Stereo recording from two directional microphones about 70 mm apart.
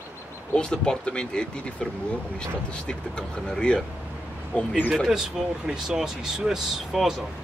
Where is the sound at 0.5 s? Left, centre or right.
Centre.